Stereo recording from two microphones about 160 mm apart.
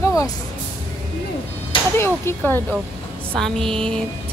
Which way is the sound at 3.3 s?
5° left (ahead or behind).